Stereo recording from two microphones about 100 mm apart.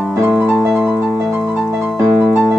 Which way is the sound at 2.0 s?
30° right (ahead or behind).